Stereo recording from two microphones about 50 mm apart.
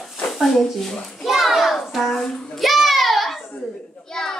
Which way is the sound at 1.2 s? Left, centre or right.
Centre.